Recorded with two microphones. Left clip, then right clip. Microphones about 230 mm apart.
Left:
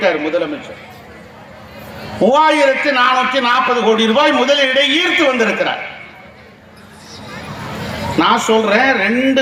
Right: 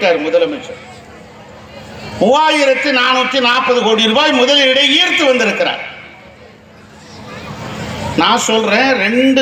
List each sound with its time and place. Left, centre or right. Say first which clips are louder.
0.0 s a man's voice: right 3 dB; right
2.2 s a man's voice: even; right
8.1 s a man's voice: even; right